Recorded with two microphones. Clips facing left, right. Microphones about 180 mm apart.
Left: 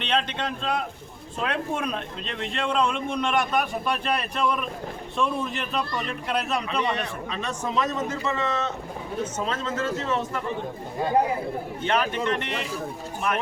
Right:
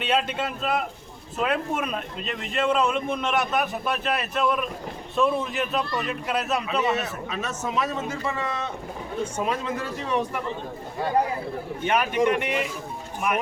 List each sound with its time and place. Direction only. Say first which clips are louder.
0.0 s a man's voice: right 2 dB; 5° right (ahead or behind)
11.8 s speech: right 3 dB; 10° right (ahead or behind)